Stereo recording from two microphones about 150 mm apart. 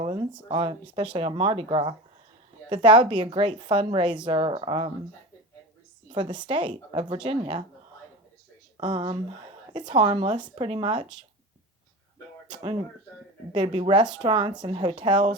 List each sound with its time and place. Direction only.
0.0 s a sound: 35° right (ahead or behind)
0.4 s a woman's voice: 35° right (ahead or behind)
6.1 s a woman's voice: 30° right (ahead or behind)
8.8 s a woman's voice: 30° right (ahead or behind)
13.5 s a woman's voice: 30° right (ahead or behind)